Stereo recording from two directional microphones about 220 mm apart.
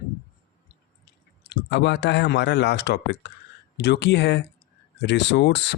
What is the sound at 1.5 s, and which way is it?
Speech, 50° left (ahead or behind).